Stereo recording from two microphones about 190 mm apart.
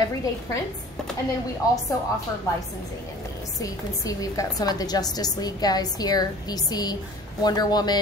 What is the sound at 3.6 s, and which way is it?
A woman's voice, 20° left (ahead or behind).